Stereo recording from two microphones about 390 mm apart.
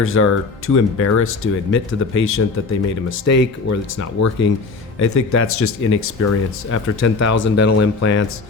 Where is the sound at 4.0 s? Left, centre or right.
Left.